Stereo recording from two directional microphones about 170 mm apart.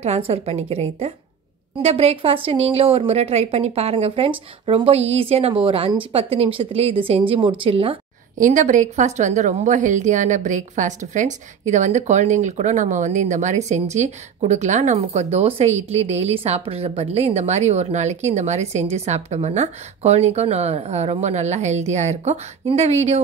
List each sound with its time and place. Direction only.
0.0 s a woman's voice: 40° right (ahead or behind)
8.4 s a woman's voice: 50° right (ahead or behind)